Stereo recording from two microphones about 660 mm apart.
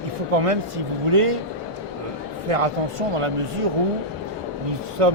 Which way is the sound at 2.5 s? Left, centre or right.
Right.